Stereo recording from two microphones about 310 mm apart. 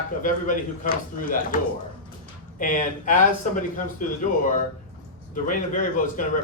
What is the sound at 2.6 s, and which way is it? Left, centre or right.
A man's voice, left.